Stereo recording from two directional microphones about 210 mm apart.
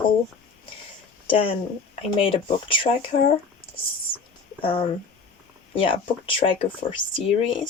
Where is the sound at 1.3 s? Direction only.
25° left (ahead or behind).